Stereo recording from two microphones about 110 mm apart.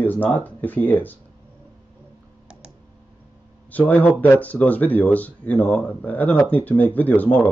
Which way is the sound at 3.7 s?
15° left (ahead or behind).